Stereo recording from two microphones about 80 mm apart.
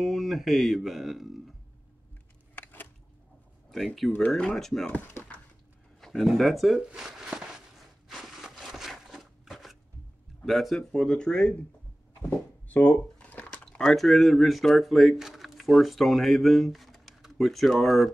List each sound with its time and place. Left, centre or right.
0.0 s speech: centre
2.5 s a sound: left
3.7 s speech: centre
4.8 s speech: centre
5.9 s speech: centre
6.9 s a sound: centre
10.4 s speech: centre
12.2 s a sound: left
13.7 s speech: centre